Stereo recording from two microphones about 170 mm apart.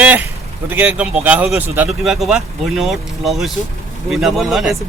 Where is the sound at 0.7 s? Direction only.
10° right (ahead or behind).